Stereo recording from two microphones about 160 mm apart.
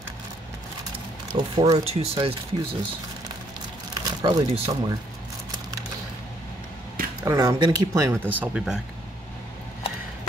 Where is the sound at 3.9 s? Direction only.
25° right (ahead or behind).